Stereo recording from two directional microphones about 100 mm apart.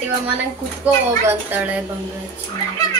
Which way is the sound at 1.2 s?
20° right (ahead or behind).